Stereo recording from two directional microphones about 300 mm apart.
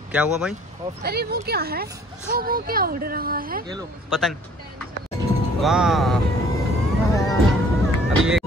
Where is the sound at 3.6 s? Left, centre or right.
Centre.